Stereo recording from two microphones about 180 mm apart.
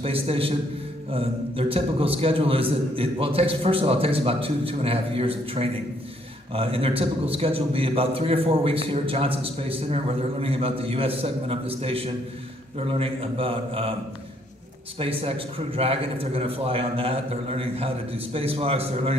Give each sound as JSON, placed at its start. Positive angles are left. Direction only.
{"t": 0.0, "sound": "a man's voice", "side_deg": -30}
{"t": 15.0, "sound": "a man's voice", "side_deg": -30}